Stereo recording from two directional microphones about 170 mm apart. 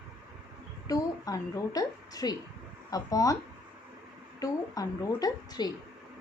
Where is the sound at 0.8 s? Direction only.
20° left (ahead or behind).